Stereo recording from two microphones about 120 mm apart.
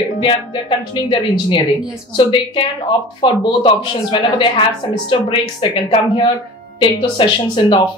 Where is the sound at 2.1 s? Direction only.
45° left (ahead or behind).